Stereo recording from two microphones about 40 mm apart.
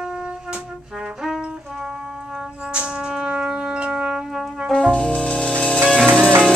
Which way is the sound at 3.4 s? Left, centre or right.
Right.